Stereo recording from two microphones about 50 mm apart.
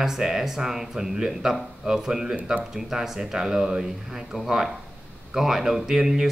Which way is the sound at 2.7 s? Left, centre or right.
Centre.